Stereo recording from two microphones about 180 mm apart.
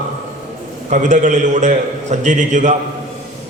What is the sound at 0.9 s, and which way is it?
A man's voice, 45° right (ahead or behind).